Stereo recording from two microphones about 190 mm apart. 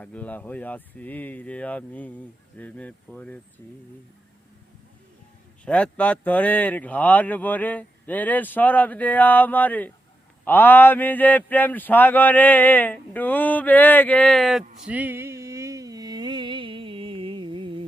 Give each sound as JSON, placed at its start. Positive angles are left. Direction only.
{"t": 0.0, "sound": "speech", "side_deg": 5}
{"t": 5.6, "sound": "speech", "side_deg": 5}
{"t": 14.8, "sound": "a sound", "side_deg": -10}